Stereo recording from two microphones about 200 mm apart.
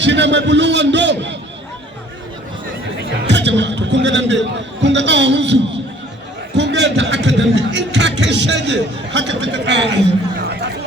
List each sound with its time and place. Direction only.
0.0 s a man's voice: 60° right (ahead or behind)
3.0 s speech: 60° right (ahead or behind)
6.6 s a man's voice: 60° right (ahead or behind)
10.5 s chatter: 60° right (ahead or behind)